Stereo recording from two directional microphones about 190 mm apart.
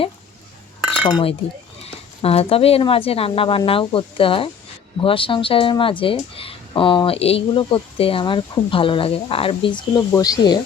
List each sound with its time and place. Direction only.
0.9 s cutlery: 30° left (ahead or behind)
1.8 s speech: 30° left (ahead or behind)